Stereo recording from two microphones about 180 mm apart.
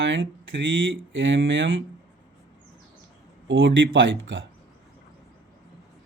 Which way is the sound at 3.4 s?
90° right.